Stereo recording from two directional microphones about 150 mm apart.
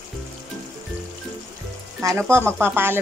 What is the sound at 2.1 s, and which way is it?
Speech, 15° right (ahead or behind).